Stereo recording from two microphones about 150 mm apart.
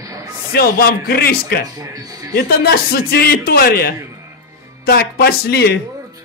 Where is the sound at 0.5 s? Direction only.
90° left.